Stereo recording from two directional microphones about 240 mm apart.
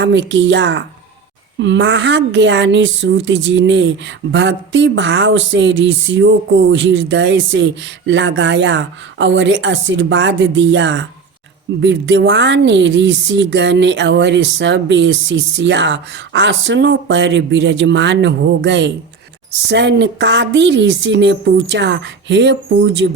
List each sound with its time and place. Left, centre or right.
0.0 s a woman's voice: right